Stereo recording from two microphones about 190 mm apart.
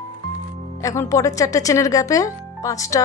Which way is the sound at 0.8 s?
15° left (ahead or behind).